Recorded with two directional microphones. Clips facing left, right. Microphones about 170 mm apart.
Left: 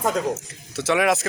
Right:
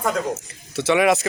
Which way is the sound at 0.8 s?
Centre (ahead or behind).